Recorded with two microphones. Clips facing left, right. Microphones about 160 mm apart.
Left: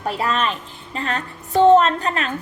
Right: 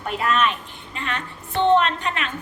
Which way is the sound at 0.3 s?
35° left (ahead or behind).